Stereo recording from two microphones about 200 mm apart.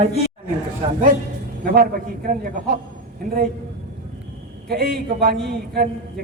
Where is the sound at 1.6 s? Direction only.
50° right (ahead or behind).